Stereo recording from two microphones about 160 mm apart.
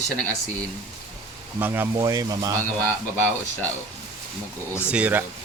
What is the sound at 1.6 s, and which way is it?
Speech, 15° right (ahead or behind).